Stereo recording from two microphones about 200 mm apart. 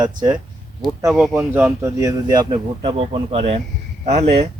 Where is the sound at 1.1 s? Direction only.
Centre (ahead or behind).